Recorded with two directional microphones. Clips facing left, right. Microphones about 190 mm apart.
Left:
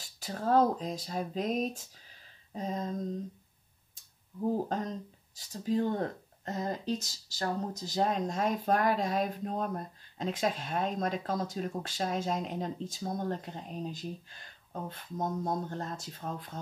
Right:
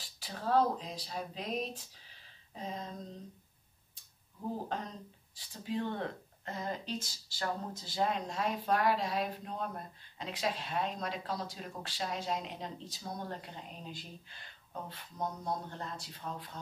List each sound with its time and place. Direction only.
0.0 s speech: 45° left (ahead or behind)
5.3 s speech: 45° left (ahead or behind)